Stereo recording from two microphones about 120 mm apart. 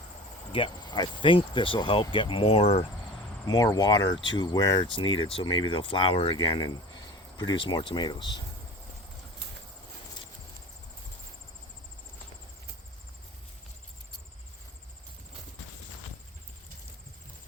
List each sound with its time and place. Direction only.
0.5 s speech: 40° left (ahead or behind)
3.4 s speech: 30° left (ahead or behind)
4.9 s speech: 45° left (ahead or behind)